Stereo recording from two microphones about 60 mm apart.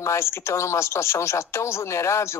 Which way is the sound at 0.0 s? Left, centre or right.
Left.